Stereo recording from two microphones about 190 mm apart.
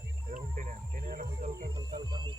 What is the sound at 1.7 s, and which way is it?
Speech, 20° right (ahead or behind).